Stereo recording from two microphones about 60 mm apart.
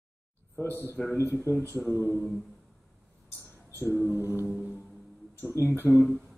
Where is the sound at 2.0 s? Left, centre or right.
Left.